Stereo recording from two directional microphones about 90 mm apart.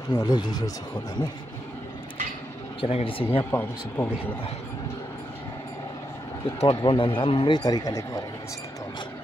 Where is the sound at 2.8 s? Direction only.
85° left.